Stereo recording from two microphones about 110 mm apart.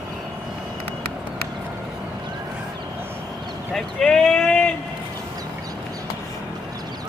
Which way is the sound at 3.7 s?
5° left (ahead or behind).